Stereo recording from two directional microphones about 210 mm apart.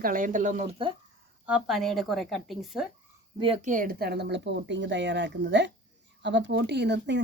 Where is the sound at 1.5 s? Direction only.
5° right (ahead or behind).